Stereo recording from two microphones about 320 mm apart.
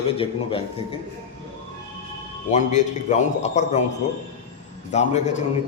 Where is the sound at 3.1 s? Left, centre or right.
Left.